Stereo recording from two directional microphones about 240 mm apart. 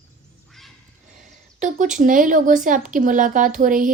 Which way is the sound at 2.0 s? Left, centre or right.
Right.